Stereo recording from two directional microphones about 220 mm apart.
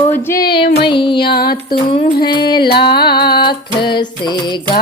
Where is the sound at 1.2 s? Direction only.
45° left (ahead or behind).